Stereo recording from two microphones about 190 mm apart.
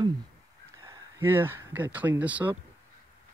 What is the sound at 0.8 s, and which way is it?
Speech, 15° right (ahead or behind).